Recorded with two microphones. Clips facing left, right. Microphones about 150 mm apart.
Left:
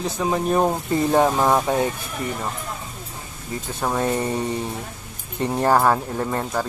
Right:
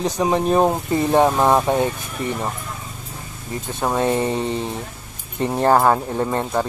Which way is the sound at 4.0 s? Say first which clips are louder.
Right 3 dB; 25° right (ahead or behind).